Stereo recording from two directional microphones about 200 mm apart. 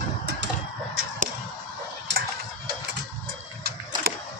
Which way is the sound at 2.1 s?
60° right (ahead or behind).